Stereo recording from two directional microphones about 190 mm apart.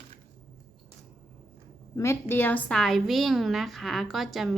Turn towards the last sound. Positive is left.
turn(degrees=0)  # may be behind; listen again after turning